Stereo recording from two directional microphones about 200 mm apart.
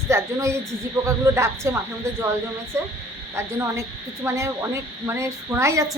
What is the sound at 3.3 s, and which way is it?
Speech, 15° right (ahead or behind).